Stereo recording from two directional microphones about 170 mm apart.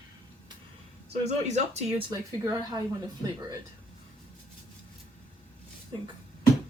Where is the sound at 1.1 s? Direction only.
40° right (ahead or behind).